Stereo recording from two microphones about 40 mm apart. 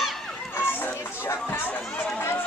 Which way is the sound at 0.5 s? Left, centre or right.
Left.